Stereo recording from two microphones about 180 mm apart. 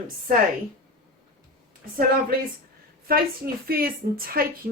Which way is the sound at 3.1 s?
55° right (ahead or behind).